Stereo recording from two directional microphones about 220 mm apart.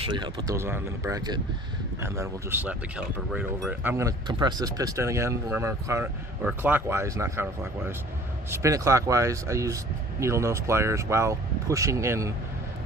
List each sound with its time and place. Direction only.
0.0 s speech: 20° right (ahead or behind)